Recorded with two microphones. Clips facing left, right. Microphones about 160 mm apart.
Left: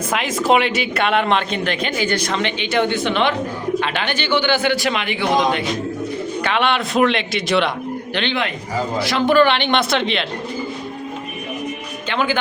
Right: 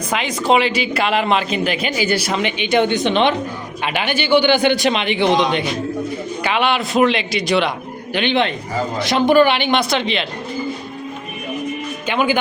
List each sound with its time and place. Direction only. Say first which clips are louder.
0.1 s a man's voice: even; centre (ahead or behind); by 5.6 s 20° right (ahead or behind)
6.4 s a man's voice: right 1 dB; 5° right (ahead or behind)
8.1 s speech: right 6 dB; 15° right (ahead or behind)
12.0 s speech: right 2 dB; 15° right (ahead or behind)